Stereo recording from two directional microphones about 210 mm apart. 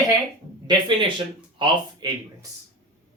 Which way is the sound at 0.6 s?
25° right (ahead or behind).